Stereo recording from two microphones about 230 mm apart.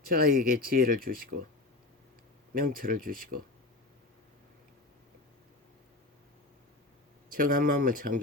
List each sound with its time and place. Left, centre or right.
0.1 s speech: right
2.6 s speech: right
7.3 s speech: right